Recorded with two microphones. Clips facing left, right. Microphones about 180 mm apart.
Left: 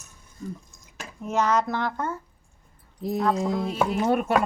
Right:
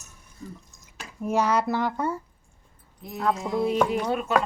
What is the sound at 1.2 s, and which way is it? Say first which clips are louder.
Speech: even; 10° right (ahead or behind).